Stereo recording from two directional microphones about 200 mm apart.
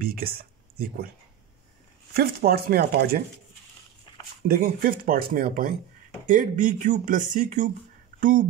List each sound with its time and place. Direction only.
0.0 s a sound: 50° right (ahead or behind)
2.1 s speech: 50° right (ahead or behind)
4.5 s speech: 50° right (ahead or behind)